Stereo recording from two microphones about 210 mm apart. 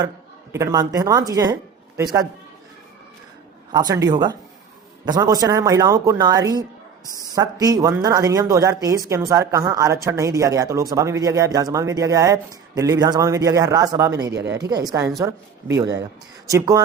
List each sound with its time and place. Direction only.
0.5 s speech: 15° right (ahead or behind)
3.7 s speech: 20° right (ahead or behind)